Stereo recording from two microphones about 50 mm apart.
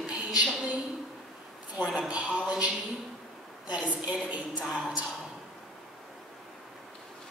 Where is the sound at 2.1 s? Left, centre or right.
Right.